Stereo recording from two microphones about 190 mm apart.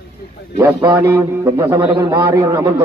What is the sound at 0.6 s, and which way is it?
A man's voice, 15° right (ahead or behind).